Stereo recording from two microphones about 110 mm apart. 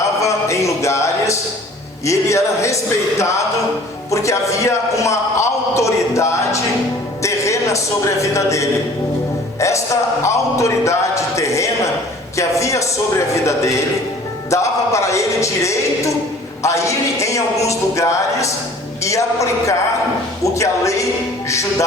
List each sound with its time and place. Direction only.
0.2 s a sound: 30° left (ahead or behind)
2.0 s a man's voice: 25° left (ahead or behind)
7.2 s music: 30° left (ahead or behind)
8.2 s a man's voice: 30° left (ahead or behind)